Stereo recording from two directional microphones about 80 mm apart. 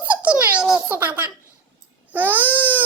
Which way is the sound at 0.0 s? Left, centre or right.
Right.